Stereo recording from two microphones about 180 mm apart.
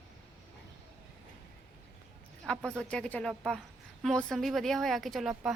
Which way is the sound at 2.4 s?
5° left (ahead or behind).